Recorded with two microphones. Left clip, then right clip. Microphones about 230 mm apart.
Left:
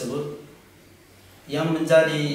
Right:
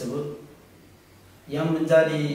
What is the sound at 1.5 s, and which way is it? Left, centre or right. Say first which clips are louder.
Speech: left 1 dB; centre.